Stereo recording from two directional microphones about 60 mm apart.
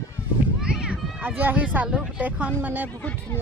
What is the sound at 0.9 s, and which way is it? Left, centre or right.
Speech, right.